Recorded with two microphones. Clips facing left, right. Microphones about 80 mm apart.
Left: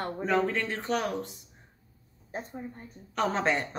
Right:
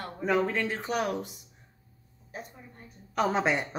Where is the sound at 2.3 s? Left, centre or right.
Left.